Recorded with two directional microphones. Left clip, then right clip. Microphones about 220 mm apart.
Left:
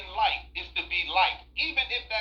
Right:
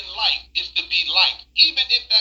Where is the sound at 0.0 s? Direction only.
50° right (ahead or behind).